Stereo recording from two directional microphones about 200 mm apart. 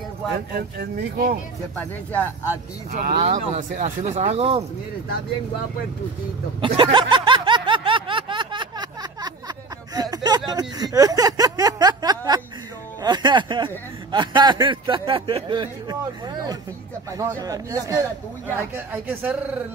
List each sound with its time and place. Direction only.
0.5 s speech: 55° right (ahead or behind)
2.9 s speech: 45° right (ahead or behind)
6.6 s a sound: 25° right (ahead or behind)
13.0 s music: 20° right (ahead or behind)
14.1 s speech: 20° right (ahead or behind)